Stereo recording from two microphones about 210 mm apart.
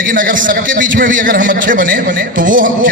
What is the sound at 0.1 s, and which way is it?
A man's voice, 40° right (ahead or behind).